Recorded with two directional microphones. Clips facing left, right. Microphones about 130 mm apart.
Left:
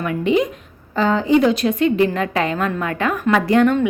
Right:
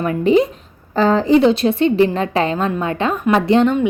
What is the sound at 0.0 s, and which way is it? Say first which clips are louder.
A woman's voice: right 4 dB; 35° right (ahead or behind).